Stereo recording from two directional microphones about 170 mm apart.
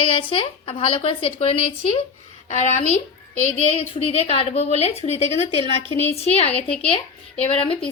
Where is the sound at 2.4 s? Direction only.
45° left (ahead or behind).